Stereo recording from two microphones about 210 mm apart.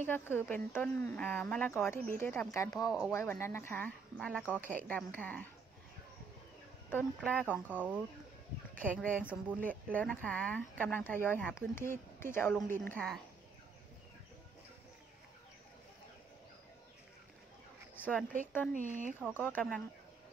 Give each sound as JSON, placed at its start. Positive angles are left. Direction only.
{"t": 0.0, "sound": "speech", "side_deg": 10}
{"t": 6.9, "sound": "speech", "side_deg": 5}
{"t": 7.7, "sound": "speech", "side_deg": -5}
{"t": 8.7, "sound": "speech", "side_deg": 5}
{"t": 17.9, "sound": "a sound", "side_deg": 10}
{"t": 18.7, "sound": "speech", "side_deg": -40}
{"t": 19.3, "sound": "speech", "side_deg": 10}